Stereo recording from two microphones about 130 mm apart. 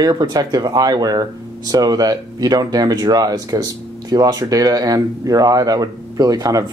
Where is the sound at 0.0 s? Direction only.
30° right (ahead or behind).